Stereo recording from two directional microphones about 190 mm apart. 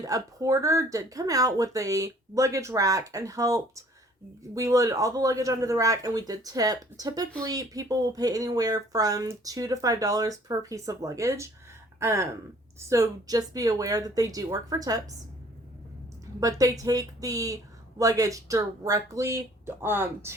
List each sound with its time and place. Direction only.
0.0 s speech: 20° right (ahead or behind)
16.2 s speech: 20° right (ahead or behind)